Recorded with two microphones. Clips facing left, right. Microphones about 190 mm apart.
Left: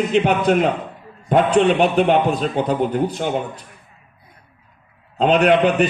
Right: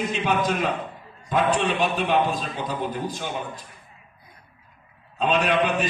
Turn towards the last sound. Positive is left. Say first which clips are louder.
# left 7 dB
turn(degrees=65)  # may be behind; listen again after turning